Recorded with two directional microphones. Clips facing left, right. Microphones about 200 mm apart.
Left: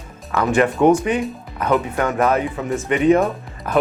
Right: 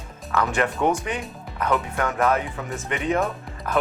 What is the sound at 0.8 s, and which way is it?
Speech, 30° left (ahead or behind).